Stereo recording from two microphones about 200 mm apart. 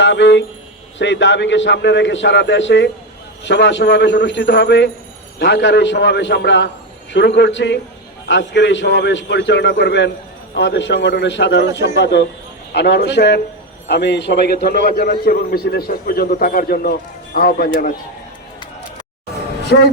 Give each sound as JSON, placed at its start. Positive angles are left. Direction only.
{"t": 0.0, "sound": "a sound", "side_deg": 65}
{"t": 0.9, "sound": "a man's voice", "side_deg": 65}
{"t": 19.7, "sound": "a man's voice", "side_deg": 60}